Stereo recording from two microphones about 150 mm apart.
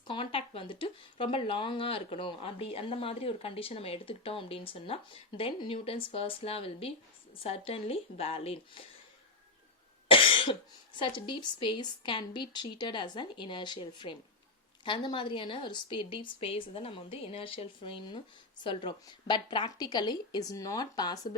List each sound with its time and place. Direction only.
0.1 s a woman's voice: 35° left (ahead or behind)
10.1 s a woman's voice: 35° left (ahead or behind)